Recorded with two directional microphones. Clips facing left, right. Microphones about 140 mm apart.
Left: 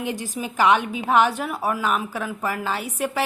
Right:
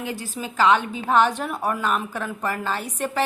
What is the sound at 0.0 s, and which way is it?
A woman's voice, 20° left (ahead or behind).